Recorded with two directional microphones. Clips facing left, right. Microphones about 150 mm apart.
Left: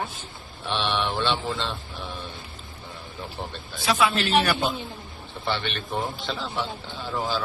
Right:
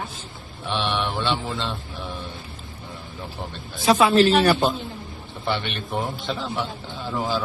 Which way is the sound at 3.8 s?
40° right (ahead or behind).